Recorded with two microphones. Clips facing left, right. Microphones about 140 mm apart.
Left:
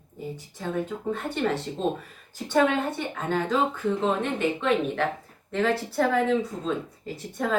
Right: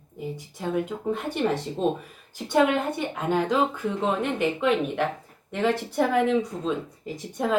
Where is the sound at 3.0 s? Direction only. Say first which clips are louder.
Right 2 dB; 10° right (ahead or behind).